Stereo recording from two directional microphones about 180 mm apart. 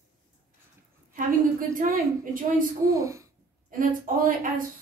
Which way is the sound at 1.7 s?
50° right (ahead or behind).